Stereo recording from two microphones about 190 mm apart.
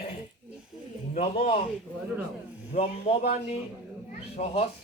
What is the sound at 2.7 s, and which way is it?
Speech, 35° left (ahead or behind).